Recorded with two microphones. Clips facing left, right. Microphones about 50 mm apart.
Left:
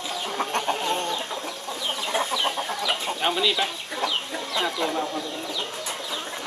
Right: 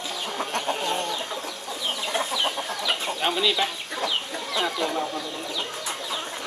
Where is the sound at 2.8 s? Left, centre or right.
Centre.